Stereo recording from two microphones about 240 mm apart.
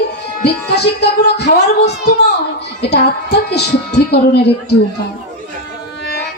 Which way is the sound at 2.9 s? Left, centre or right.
Left.